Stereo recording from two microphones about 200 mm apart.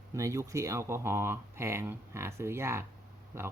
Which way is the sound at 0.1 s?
15° right (ahead or behind).